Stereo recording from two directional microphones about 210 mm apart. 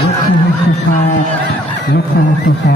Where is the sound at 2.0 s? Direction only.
50° left (ahead or behind).